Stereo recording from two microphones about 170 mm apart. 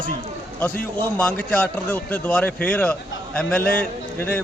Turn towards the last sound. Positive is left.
turn(degrees=10)  # may be behind; listen again after turning